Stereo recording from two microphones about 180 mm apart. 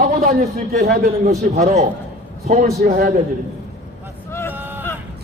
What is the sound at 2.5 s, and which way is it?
Speech, 55° right (ahead or behind).